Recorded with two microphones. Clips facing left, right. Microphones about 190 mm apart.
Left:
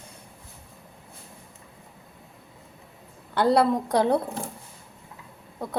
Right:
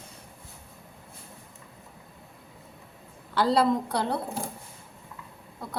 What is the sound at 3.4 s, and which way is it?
Speech, 60° left (ahead or behind).